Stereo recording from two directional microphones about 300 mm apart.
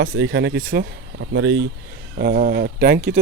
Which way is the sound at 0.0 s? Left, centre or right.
Right.